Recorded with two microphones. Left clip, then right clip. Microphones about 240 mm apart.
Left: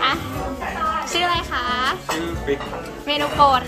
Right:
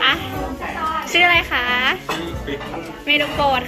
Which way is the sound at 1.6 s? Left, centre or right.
Right.